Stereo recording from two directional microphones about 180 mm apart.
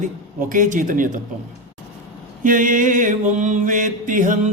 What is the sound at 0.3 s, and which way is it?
Mantra, 50° right (ahead or behind).